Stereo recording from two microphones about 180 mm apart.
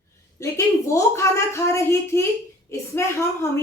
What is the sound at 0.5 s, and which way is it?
A woman's voice, 15° left (ahead or behind).